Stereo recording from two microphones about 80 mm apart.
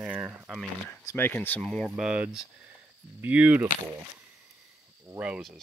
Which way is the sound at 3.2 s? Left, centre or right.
Centre.